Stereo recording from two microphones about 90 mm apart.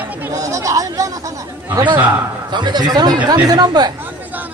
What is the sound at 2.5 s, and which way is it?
Speech, 55° right (ahead or behind).